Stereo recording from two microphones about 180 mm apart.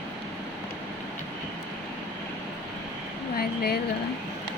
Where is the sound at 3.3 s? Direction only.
60° left (ahead or behind).